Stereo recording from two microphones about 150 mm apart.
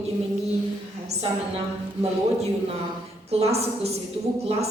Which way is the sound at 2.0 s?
45° right (ahead or behind).